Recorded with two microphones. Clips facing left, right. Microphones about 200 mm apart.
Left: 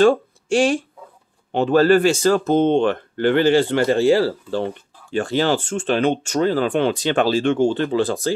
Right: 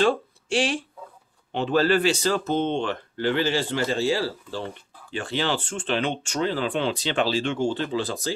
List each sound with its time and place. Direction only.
0.0 s speech: 45° left (ahead or behind)
5.1 s speech: 45° left (ahead or behind)